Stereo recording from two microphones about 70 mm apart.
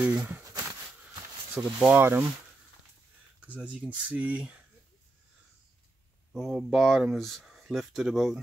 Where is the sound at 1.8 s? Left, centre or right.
Right.